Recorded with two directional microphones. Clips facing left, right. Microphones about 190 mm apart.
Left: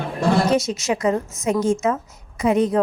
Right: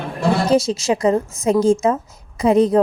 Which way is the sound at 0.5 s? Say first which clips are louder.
Right 4 dB; 30° right (ahead or behind).